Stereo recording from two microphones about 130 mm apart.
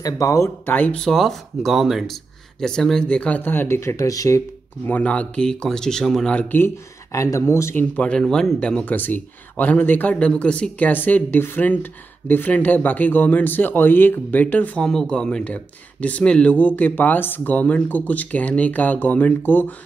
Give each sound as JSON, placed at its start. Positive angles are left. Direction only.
{"t": 0.0, "sound": "speech", "side_deg": 25}
{"t": 4.8, "sound": "speech", "side_deg": 10}